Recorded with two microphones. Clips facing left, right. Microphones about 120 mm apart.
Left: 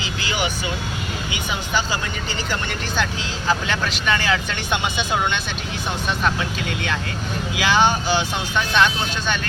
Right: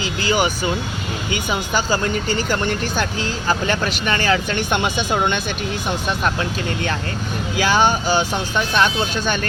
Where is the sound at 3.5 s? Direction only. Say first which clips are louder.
Right 1 dB; 50° right (ahead or behind).